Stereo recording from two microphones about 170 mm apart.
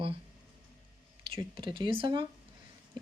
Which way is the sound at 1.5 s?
30° right (ahead or behind).